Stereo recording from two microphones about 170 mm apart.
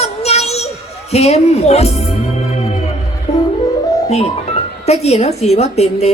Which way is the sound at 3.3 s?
40° left (ahead or behind).